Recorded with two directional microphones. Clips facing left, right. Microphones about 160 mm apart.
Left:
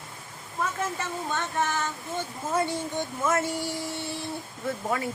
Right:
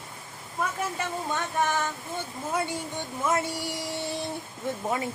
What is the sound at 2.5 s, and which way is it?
Speech, 10° right (ahead or behind).